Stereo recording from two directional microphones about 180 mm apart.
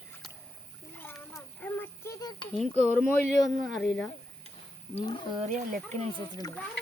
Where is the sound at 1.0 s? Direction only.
10° left (ahead or behind).